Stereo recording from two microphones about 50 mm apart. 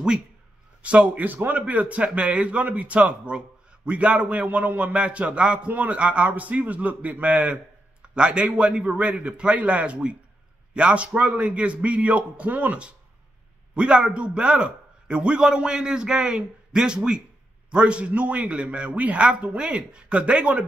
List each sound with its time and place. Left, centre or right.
0.8 s a man's voice: right
1.2 s a man's voice: right